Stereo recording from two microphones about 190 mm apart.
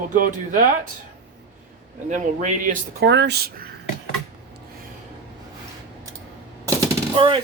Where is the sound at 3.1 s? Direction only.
65° right (ahead or behind).